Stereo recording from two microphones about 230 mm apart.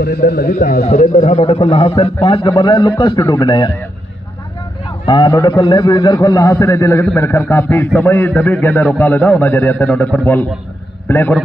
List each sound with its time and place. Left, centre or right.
0.0 s a man's voice: left
1.4 s a man's voice: left
4.8 s a man's voice: centre